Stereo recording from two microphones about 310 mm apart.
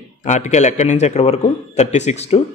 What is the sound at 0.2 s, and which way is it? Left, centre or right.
A man's voice, left.